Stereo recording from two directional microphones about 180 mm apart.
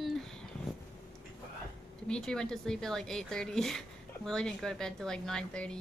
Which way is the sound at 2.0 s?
5° left (ahead or behind).